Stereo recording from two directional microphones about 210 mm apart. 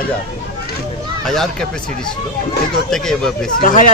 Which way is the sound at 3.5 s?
40° left (ahead or behind).